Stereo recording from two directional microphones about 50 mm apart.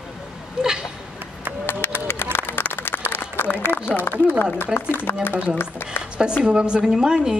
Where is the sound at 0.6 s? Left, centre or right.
Centre.